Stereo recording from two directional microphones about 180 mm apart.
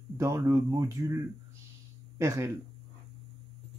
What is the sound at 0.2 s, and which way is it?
Speech, 15° right (ahead or behind).